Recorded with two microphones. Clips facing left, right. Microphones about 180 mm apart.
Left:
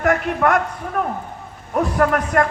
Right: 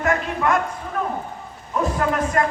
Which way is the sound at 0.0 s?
65° left (ahead or behind).